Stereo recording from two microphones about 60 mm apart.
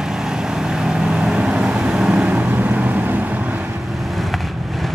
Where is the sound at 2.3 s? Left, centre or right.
Right.